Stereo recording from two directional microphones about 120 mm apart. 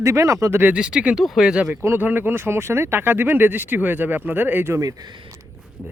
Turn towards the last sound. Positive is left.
turn(degrees=-25)  # may be behind; listen again after turning